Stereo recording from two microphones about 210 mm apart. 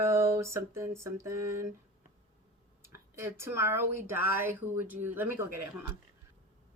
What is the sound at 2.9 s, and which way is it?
Speech, 10° right (ahead or behind).